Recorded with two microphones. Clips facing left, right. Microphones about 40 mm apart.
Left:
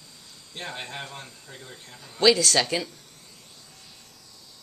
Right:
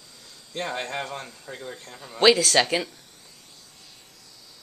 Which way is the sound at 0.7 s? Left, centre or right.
Right.